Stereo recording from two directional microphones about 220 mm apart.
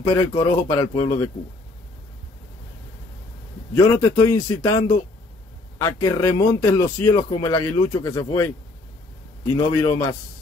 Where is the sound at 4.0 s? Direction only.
15° left (ahead or behind).